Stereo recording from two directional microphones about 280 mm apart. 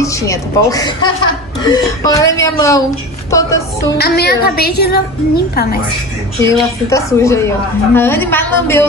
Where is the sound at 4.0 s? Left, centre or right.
Left.